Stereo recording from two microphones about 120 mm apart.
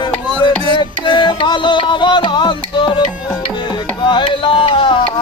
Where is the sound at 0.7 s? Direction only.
40° left (ahead or behind).